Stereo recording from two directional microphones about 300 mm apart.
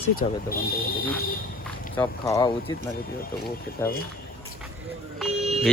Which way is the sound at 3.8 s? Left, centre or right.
Centre.